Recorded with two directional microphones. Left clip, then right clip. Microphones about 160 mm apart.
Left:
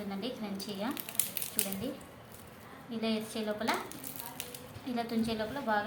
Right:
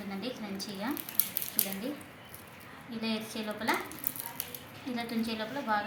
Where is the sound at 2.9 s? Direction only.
15° left (ahead or behind).